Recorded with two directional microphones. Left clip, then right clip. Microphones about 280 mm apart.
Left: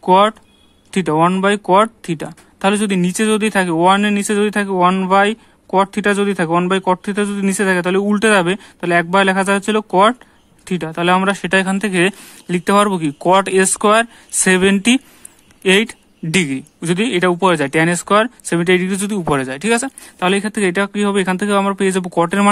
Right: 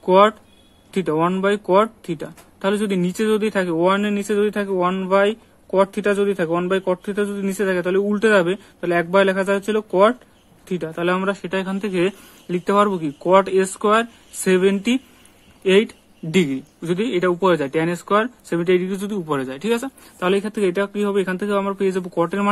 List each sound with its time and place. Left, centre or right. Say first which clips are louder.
0.0 s speech: left 2 dB; left